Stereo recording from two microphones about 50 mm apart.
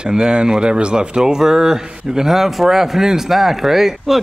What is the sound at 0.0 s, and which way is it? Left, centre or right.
A man's voice, centre.